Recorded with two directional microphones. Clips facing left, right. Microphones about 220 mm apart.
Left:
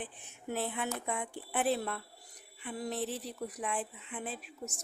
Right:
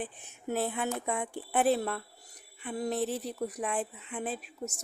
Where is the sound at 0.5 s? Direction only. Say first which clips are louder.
Right 4 dB; 45° right (ahead or behind).